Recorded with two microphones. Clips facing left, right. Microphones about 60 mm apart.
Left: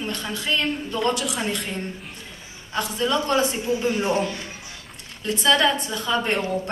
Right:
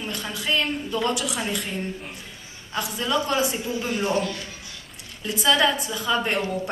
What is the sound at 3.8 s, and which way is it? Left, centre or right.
Speech, left.